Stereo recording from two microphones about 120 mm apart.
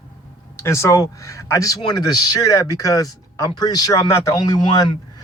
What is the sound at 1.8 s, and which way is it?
A man's voice, 35° left (ahead or behind).